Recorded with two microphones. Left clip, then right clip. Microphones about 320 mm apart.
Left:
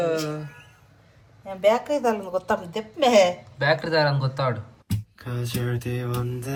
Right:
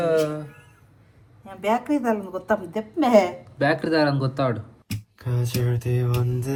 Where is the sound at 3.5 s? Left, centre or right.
Centre.